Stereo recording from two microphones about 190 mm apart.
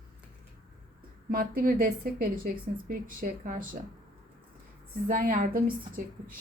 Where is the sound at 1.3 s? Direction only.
50° right (ahead or behind).